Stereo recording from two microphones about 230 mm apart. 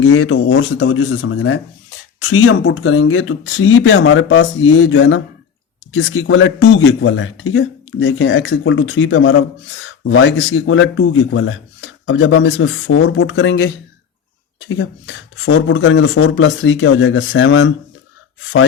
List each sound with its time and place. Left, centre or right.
0.0 s speech: left
14.7 s speech: left